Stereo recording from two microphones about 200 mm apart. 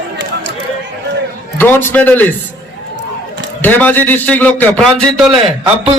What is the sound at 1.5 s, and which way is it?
Speech, 10° left (ahead or behind).